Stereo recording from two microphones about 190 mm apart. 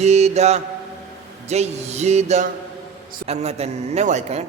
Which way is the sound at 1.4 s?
35° right (ahead or behind).